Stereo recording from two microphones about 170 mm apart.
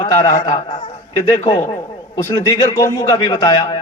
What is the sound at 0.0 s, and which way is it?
Speech, 25° left (ahead or behind).